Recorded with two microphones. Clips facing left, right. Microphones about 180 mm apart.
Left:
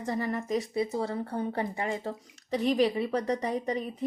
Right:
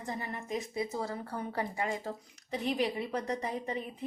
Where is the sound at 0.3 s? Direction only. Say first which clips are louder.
Left 6 dB; 40° left (ahead or behind).